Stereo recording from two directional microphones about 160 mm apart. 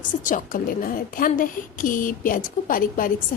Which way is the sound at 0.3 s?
55° left (ahead or behind).